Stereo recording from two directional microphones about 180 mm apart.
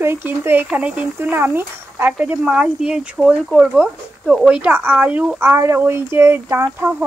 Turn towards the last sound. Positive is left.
turn(degrees=-10)  # may be behind; listen again after turning